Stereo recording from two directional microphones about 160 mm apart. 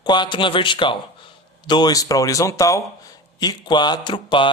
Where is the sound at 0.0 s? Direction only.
30° left (ahead or behind).